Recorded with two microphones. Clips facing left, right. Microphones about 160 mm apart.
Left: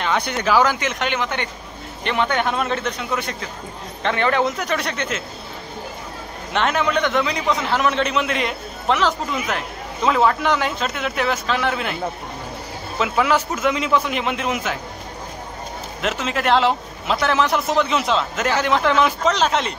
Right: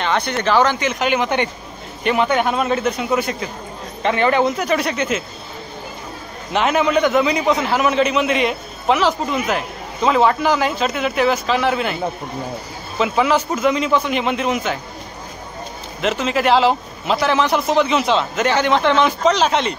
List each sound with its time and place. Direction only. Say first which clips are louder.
0.0 s a man's voice: right 2 dB; 5° left (ahead or behind)
1.2 s a man's voice: right 6 dB; 15° right (ahead or behind)
2.0 s a man's voice: right 4 dB; 5° right (ahead or behind)
6.5 s a man's voice: right 4 dB; 5° right (ahead or behind)
13.0 s a man's voice: right 2 dB; centre (ahead or behind)
16.0 s a man's voice: right 5 dB; centre (ahead or behind)